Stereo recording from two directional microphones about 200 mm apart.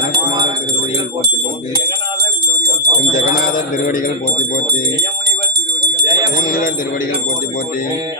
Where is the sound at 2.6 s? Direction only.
55° right (ahead or behind).